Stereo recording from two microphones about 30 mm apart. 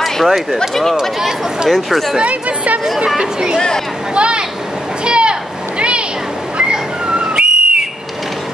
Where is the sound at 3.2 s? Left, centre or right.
Right.